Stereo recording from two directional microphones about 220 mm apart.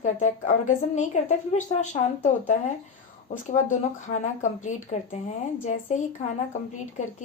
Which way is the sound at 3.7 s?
35° left (ahead or behind).